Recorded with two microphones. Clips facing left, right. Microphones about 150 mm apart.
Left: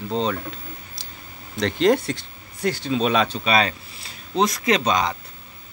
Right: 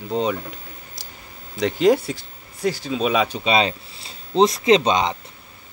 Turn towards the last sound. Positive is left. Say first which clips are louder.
# right 4 dB
turn(degrees=-25)  # may be behind; listen again after turning